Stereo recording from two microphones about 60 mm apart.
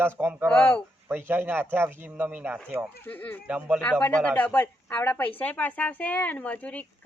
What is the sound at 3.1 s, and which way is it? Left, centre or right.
Speech, left.